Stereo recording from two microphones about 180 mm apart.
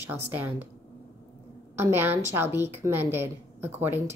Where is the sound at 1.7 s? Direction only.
10° right (ahead or behind).